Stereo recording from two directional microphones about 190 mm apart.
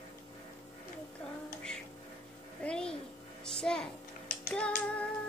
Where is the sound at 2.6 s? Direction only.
5° left (ahead or behind).